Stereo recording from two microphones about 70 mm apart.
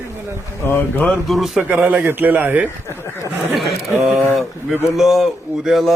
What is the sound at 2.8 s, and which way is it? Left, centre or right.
Speech, left.